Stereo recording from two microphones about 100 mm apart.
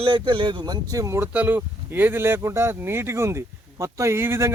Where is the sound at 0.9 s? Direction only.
30° right (ahead or behind).